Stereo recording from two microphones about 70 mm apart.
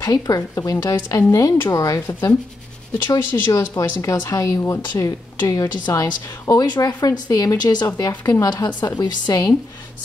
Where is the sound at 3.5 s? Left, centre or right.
Left.